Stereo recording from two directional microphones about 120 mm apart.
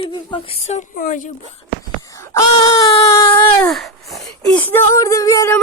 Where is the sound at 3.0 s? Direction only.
30° left (ahead or behind).